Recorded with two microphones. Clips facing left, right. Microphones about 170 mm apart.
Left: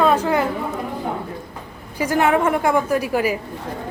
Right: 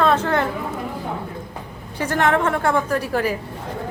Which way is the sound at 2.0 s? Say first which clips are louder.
Left 2 dB; 10° left (ahead or behind).